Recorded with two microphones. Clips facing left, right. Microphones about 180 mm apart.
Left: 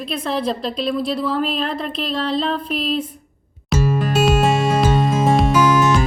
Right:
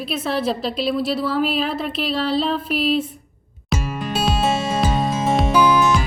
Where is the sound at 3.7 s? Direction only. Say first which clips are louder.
Left 6 dB; centre (ahead or behind).